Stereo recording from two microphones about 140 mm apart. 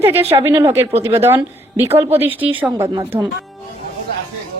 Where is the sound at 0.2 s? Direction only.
45° right (ahead or behind).